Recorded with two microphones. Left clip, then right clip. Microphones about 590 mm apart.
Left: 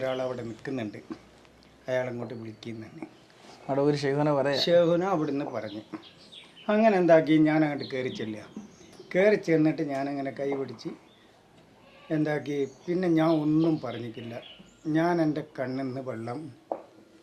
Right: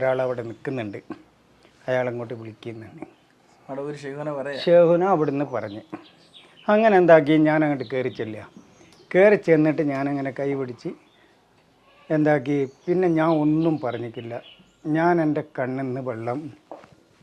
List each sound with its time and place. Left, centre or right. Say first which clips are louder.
0.0 s speech: right 8 dB; right
3.7 s speech: left 6 dB; left
4.6 s speech: right 9 dB; right
12.0 s speech: right 8 dB; right